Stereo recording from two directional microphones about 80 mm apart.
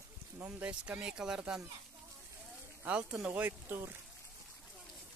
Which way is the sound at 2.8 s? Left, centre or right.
Centre.